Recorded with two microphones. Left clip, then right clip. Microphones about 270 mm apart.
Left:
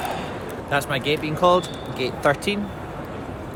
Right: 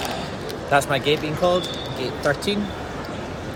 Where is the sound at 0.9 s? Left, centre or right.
Left.